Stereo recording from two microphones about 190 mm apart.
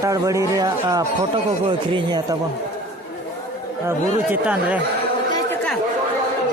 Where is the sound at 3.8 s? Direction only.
10° right (ahead or behind).